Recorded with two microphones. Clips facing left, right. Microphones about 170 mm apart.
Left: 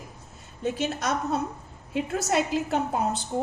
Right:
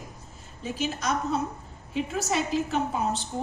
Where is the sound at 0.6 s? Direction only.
65° left (ahead or behind).